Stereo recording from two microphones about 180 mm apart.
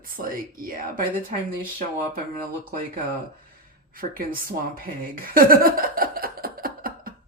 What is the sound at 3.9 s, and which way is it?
Speech, 55° right (ahead or behind).